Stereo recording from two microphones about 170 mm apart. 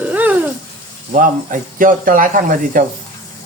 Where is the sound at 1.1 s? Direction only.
50° right (ahead or behind).